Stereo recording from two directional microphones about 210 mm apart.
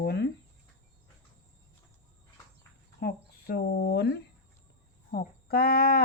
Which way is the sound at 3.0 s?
50° left (ahead or behind).